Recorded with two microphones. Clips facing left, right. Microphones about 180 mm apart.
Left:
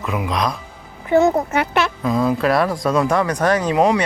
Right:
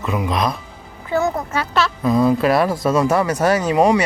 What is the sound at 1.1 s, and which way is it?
Speech, 25° left (ahead or behind).